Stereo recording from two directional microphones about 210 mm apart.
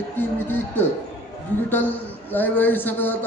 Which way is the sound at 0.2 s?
10° left (ahead or behind).